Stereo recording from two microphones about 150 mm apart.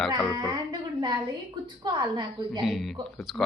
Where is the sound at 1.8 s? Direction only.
30° right (ahead or behind).